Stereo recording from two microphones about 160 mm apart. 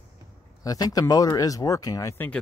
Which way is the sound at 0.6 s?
20° left (ahead or behind).